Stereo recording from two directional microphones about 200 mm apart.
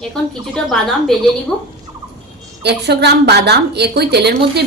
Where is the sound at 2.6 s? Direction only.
55° right (ahead or behind).